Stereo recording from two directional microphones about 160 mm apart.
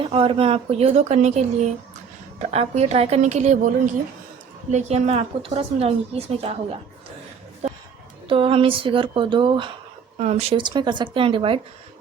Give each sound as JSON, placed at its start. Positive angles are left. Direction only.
{"t": 0.0, "sound": "a woman's voice", "side_deg": -35}
{"t": 4.7, "sound": "a woman's voice", "side_deg": -45}
{"t": 7.6, "sound": "a sound", "side_deg": -40}
{"t": 8.3, "sound": "a woman's voice", "side_deg": -35}
{"t": 10.2, "sound": "a woman's voice", "side_deg": -45}